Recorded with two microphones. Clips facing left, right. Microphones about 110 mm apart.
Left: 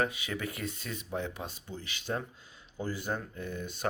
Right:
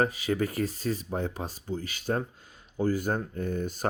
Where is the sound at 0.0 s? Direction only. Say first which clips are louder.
Right 6 dB; 40° right (ahead or behind).